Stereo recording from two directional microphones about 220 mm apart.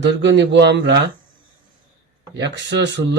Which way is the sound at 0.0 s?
50° right (ahead or behind).